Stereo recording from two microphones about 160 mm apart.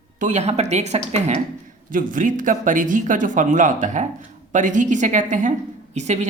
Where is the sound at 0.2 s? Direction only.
45° right (ahead or behind).